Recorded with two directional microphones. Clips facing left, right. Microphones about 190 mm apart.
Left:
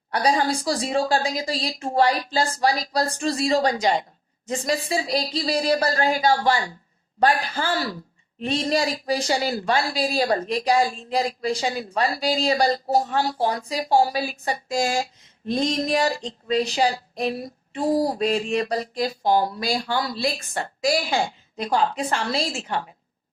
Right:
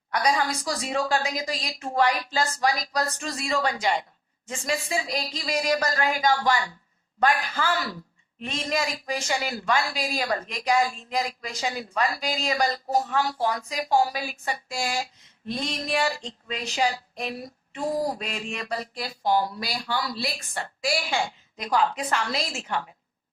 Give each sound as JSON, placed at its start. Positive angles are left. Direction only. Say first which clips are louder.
{"t": 0.1, "sound": "speech", "louder": "left 3 dB", "side_deg": 30}